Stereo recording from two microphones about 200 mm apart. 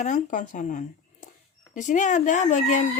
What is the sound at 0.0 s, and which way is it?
Speech, 40° left (ahead or behind).